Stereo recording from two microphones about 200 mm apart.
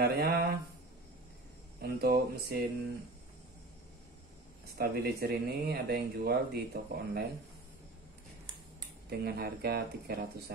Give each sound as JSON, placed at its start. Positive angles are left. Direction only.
{"t": 0.0, "sound": "speech", "side_deg": -50}
{"t": 1.8, "sound": "speech", "side_deg": -50}
{"t": 4.7, "sound": "speech", "side_deg": -50}
{"t": 9.2, "sound": "speech", "side_deg": -50}